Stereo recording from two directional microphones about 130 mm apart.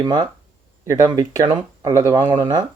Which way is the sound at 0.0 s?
30° right (ahead or behind).